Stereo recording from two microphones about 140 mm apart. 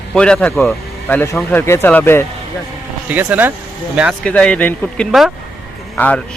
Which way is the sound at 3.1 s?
15° right (ahead or behind).